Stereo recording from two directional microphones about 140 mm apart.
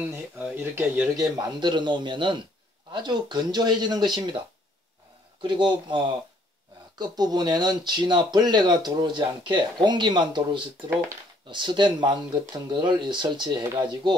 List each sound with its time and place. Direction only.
0.0 s speech: 15° right (ahead or behind)
1.1 s speech: 30° right (ahead or behind)
5.4 s speech: 35° right (ahead or behind)